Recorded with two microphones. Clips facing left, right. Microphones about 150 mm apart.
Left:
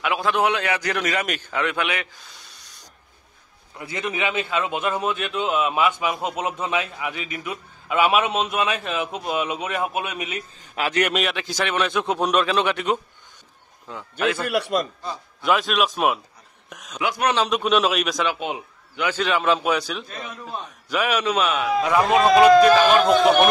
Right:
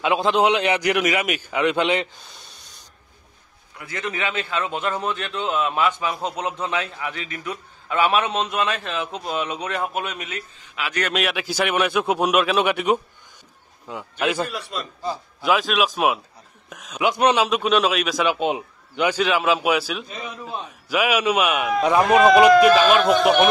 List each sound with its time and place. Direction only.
0.0 s a man's voice: 20° right (ahead or behind)
1.6 s a man's voice: 20° right (ahead or behind)
3.7 s a man's voice: 20° left (ahead or behind)
10.8 s a man's voice: 40° left (ahead or behind)
11.1 s a man's voice: 5° right (ahead or behind)
14.5 s a man's voice: 70° left (ahead or behind)
15.0 s a man's voice: centre (ahead or behind)
17.0 s a man's voice: 20° right (ahead or behind)
17.4 s a man's voice: centre (ahead or behind)
18.2 s a man's voice: 20° right (ahead or behind)
19.1 s a man's voice: 5° right (ahead or behind)